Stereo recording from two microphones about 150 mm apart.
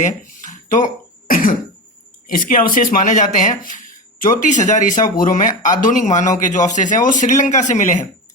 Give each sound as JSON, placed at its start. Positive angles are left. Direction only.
{"t": 0.0, "sound": "a sound", "side_deg": 55}
{"t": 1.3, "sound": "cough", "side_deg": 70}
{"t": 2.2, "sound": "speech", "side_deg": 65}
{"t": 5.0, "sound": "speech", "side_deg": 65}